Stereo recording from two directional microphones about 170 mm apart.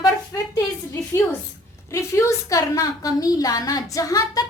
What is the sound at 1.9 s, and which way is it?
A woman's voice, 15° left (ahead or behind).